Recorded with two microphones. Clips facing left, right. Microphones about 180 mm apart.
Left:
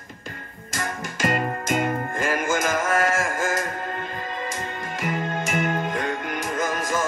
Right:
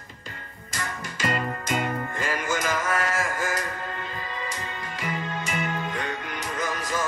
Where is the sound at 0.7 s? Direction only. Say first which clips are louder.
Left 4 dB; 50° left (ahead or behind).